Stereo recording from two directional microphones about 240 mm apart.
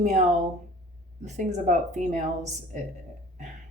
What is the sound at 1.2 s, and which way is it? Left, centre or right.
Speech, right.